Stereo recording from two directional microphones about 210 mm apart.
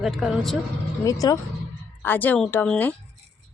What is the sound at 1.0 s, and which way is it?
Speech, 15° left (ahead or behind).